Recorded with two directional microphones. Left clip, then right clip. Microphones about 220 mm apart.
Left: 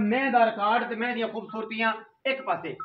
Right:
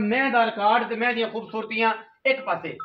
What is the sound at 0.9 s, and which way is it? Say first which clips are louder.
A man's voice: right 5 dB; 30° right (ahead or behind).